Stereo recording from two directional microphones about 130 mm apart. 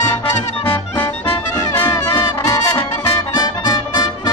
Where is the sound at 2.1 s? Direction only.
20° left (ahead or behind).